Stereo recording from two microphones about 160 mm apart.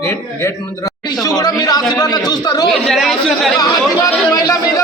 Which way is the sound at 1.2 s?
25° left (ahead or behind).